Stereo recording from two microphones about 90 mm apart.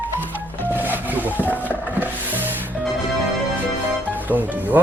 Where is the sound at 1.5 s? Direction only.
20° left (ahead or behind).